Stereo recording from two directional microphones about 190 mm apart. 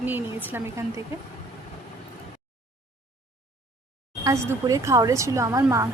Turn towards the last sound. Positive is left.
turn(degrees=-15)  # may be behind; listen again after turning